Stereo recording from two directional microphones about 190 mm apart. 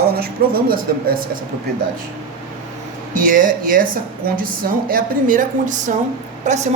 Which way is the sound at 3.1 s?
45° right (ahead or behind).